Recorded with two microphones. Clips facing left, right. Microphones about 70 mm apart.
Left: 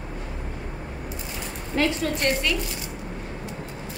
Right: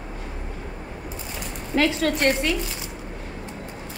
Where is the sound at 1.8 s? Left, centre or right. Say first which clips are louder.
Right 3 dB; right.